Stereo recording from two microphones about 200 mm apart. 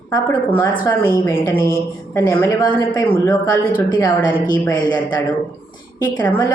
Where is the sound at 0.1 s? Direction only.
15° left (ahead or behind).